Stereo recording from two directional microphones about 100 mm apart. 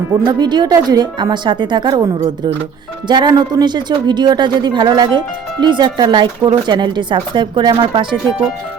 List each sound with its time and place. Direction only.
0.3 s a woman's voice: 45° right (ahead or behind)